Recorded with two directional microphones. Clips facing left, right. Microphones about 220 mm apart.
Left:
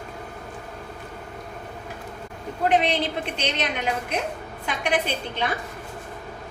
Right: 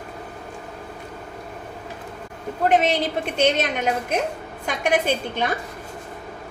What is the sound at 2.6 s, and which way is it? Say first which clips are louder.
A woman's voice: right 2 dB; 45° right (ahead or behind).